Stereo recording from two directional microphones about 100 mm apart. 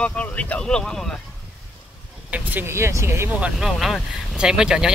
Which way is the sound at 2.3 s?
15° right (ahead or behind).